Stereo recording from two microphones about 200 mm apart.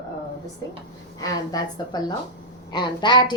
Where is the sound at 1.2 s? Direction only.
20° left (ahead or behind).